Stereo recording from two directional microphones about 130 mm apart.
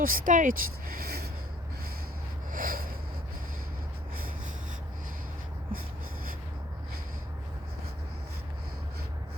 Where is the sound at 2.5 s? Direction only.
90° right.